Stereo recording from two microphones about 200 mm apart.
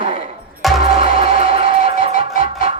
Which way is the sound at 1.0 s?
25° right (ahead or behind).